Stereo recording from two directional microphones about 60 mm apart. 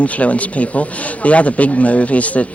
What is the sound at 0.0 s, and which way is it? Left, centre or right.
Speech, left.